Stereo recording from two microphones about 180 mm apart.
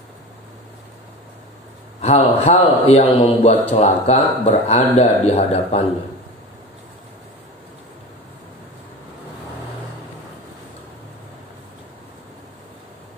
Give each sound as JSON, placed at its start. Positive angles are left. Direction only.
{"t": 2.0, "sound": "a man's voice", "side_deg": 35}